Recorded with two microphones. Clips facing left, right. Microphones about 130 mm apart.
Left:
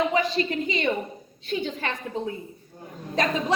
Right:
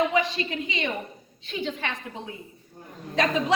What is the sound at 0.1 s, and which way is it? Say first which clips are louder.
A woman's voice: left 2 dB; 35° left (ahead or behind).